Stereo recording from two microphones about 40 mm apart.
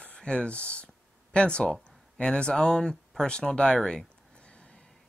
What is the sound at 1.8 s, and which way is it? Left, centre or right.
Speech, left.